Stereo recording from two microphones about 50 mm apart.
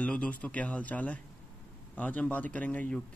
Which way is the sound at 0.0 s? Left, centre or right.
Left.